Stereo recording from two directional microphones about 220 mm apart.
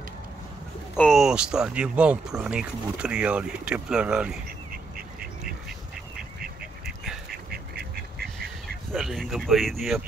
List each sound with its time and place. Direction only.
0.9 s speech: centre (ahead or behind)
7.5 s duck: 45° right (ahead or behind)
8.9 s speech: centre (ahead or behind)